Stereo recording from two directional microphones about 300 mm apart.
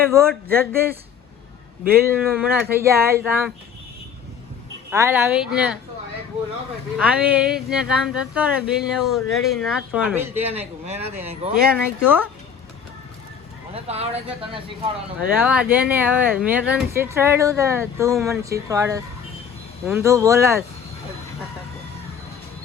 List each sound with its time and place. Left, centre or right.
0.3 s speech: centre
1.9 s speech: centre
4.9 s speech: centre
6.9 s speech: centre
10.5 s speech: right
11.7 s speech: centre
13.7 s speech: centre
15.4 s speech: centre